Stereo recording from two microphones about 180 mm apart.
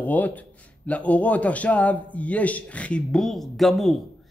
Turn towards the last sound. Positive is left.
turn(degrees=0)  # may be behind; listen again after turning